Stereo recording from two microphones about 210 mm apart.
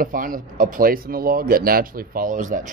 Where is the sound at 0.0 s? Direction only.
40° right (ahead or behind).